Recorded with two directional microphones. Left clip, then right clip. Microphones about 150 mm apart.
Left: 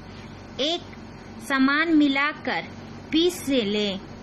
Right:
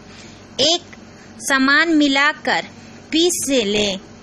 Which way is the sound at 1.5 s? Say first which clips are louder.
Right 6 dB; 40° right (ahead or behind).